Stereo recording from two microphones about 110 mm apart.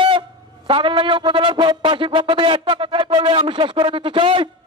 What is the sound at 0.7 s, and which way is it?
Music, 50° right (ahead or behind).